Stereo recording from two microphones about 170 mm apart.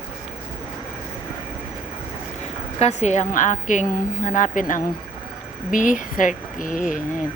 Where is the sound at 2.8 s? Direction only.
40° left (ahead or behind).